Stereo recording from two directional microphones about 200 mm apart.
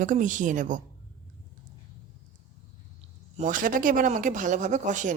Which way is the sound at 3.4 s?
40° right (ahead or behind).